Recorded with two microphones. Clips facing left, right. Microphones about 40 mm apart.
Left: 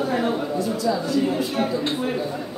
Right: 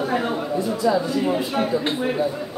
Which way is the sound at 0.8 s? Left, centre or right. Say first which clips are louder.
Right 2 dB; centre.